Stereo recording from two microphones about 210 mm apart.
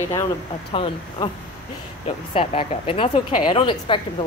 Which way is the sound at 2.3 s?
25° left (ahead or behind).